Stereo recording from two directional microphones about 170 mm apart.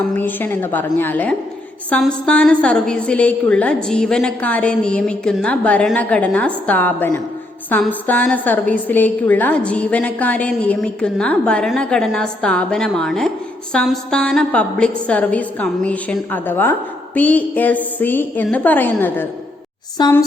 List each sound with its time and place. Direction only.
0.2 s a woman's voice: 10° left (ahead or behind)
20.0 s speech: 25° left (ahead or behind)